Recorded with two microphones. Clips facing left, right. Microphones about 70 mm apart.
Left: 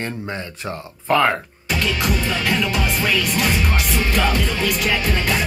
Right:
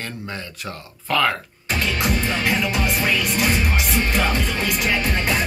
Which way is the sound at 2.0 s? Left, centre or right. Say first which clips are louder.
Even; right.